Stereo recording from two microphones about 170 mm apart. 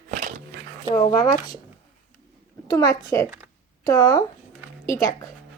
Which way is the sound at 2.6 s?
20° left (ahead or behind).